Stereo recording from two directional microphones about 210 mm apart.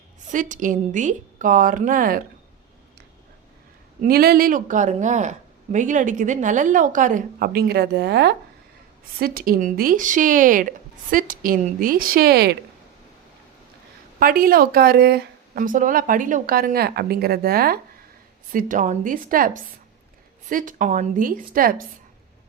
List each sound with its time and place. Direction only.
0.3 s speech: 40° right (ahead or behind)
4.0 s speech: 45° right (ahead or behind)
14.2 s speech: 45° right (ahead or behind)
20.5 s speech: 40° right (ahead or behind)